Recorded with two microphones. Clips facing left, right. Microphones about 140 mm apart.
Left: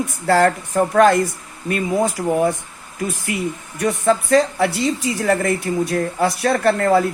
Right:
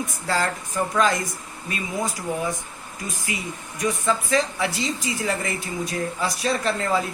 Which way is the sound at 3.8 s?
65° left (ahead or behind).